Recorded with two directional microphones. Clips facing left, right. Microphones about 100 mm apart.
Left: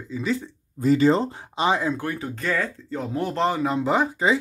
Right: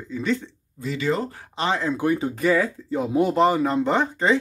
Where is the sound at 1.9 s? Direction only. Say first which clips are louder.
Right 7 dB; 20° right (ahead or behind); by 4.4 s 5° left (ahead or behind).